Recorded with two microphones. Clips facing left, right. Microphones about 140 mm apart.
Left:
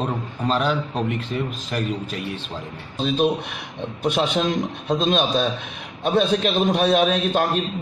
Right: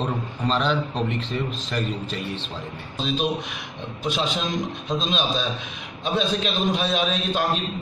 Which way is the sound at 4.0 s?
60° left (ahead or behind).